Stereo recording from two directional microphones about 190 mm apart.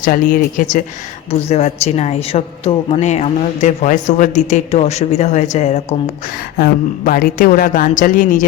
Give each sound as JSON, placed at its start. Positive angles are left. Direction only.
{"t": 0.0, "sound": "a woman's voice", "side_deg": 45}
{"t": 6.6, "sound": "speech", "side_deg": 50}